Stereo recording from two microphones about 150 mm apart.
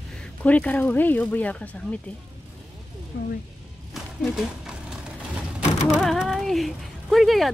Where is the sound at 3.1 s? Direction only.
90° left.